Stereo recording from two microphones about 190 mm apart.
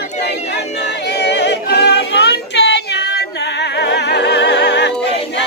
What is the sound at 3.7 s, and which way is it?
Music, 65° left (ahead or behind).